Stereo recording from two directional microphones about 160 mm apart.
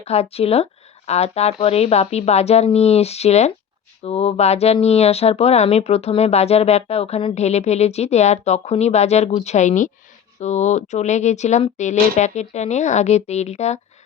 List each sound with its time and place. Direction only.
0.0 s speech: 40° left (ahead or behind)